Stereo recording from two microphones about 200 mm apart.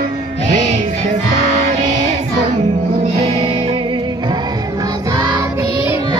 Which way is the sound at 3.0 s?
30° right (ahead or behind).